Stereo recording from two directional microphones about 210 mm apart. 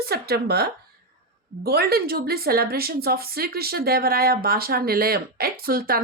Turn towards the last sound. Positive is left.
turn(degrees=-45)  # may be behind; listen again after turning